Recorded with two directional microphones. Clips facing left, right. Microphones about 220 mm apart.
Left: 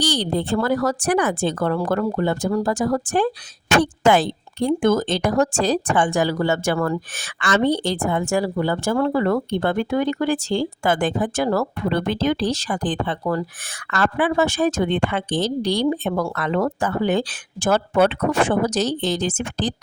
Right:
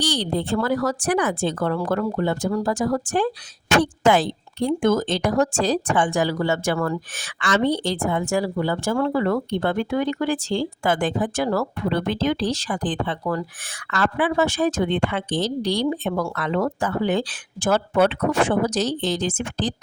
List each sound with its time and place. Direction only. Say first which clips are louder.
0.0 s a woman's voice: left 2 dB; 45° left (ahead or behind)